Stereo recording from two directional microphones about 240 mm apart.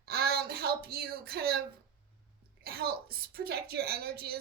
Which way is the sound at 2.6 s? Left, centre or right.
Right.